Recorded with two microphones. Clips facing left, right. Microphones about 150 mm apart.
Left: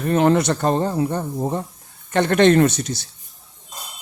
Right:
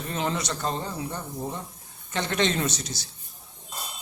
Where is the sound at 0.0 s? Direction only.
60° left (ahead or behind).